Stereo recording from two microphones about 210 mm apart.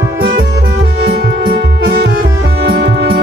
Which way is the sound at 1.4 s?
50° right (ahead or behind).